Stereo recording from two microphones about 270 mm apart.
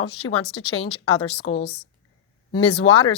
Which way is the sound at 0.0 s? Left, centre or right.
Left.